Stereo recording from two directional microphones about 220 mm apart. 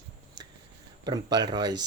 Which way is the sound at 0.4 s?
20° right (ahead or behind).